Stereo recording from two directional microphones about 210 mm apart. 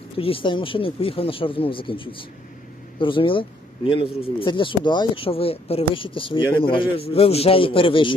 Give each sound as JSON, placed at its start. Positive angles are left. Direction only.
{"t": 0.2, "sound": "speech", "side_deg": 25}